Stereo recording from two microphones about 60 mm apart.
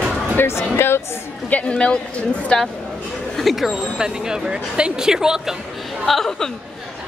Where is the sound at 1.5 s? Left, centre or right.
Centre.